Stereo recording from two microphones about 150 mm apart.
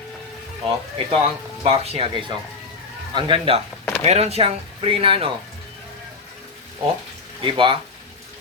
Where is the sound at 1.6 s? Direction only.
40° right (ahead or behind).